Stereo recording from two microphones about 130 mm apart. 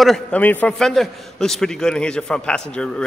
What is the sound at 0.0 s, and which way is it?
Speech, centre (ahead or behind).